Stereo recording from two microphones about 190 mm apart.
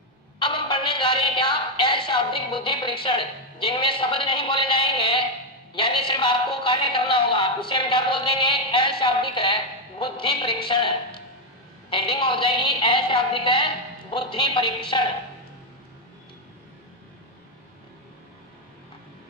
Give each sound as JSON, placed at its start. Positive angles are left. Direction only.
{"t": 0.4, "sound": "music", "side_deg": 25}
{"t": 5.8, "sound": "speech", "side_deg": 25}
{"t": 9.0, "sound": "music", "side_deg": 25}
{"t": 10.7, "sound": "speech", "side_deg": 25}